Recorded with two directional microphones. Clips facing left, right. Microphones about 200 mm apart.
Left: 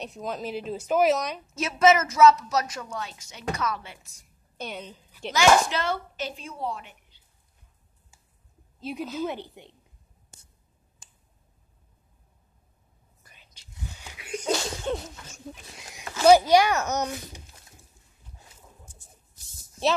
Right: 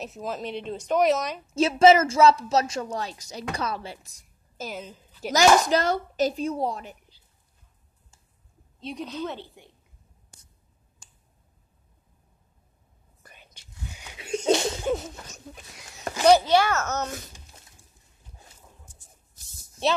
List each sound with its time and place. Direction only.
0.0 s speech: centre (ahead or behind)
1.5 s a woman's voice: 30° right (ahead or behind)
4.6 s speech: centre (ahead or behind)
5.3 s a woman's voice: 40° right (ahead or behind)
8.7 s a woman's voice: 5° left (ahead or behind)
13.2 s whispering: 55° right (ahead or behind)
14.1 s a sound: 25° right (ahead or behind)
16.3 s a woman's voice: 10° left (ahead or behind)